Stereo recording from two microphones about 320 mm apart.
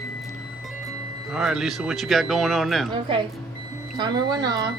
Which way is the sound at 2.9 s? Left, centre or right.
Centre.